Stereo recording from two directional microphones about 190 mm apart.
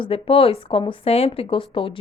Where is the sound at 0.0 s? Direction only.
30° left (ahead or behind).